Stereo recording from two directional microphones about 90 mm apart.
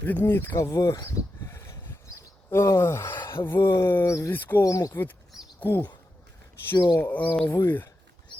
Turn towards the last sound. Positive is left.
turn(degrees=25)  # may be behind; listen again after turning